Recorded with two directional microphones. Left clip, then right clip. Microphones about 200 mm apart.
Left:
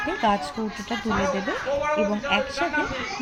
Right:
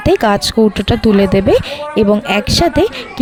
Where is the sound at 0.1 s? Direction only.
55° right (ahead or behind).